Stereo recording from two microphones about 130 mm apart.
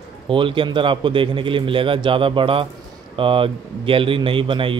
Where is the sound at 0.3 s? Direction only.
40° right (ahead or behind).